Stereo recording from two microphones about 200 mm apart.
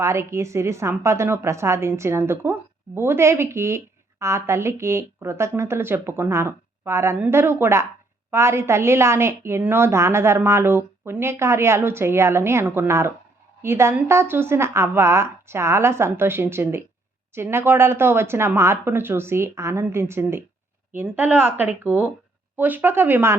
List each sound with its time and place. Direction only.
0.0 s a woman's voice: 15° right (ahead or behind)